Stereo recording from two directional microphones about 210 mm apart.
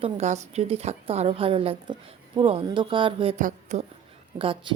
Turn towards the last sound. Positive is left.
turn(degrees=-25)  # may be behind; listen again after turning